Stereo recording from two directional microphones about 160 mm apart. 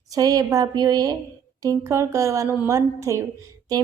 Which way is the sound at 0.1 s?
25° right (ahead or behind).